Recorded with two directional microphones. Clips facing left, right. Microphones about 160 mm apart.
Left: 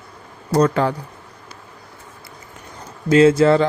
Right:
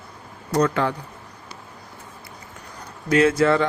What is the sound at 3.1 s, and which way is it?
Speech, 30° left (ahead or behind).